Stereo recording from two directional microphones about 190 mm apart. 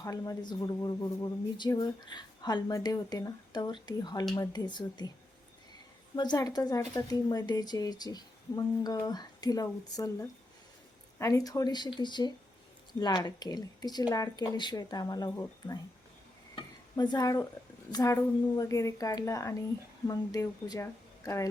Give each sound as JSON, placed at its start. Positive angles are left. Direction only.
{"t": 0.0, "sound": "speech", "side_deg": 20}
{"t": 6.1, "sound": "speech", "side_deg": 20}
{"t": 16.9, "sound": "a woman's voice", "side_deg": 20}